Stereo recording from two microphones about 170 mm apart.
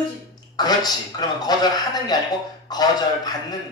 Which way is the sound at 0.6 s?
25° left (ahead or behind).